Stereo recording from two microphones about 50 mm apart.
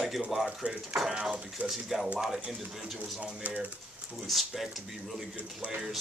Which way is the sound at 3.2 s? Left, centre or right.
Right.